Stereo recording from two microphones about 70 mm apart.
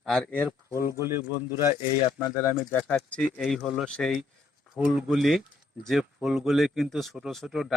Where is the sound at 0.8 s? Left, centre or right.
Right.